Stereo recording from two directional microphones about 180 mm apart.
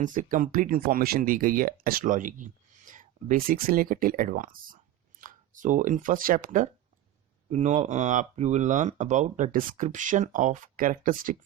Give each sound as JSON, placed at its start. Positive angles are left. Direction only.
{"t": 0.0, "sound": "speech", "side_deg": -45}